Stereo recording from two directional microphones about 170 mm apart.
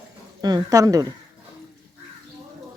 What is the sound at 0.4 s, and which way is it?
Speech, 20° right (ahead or behind).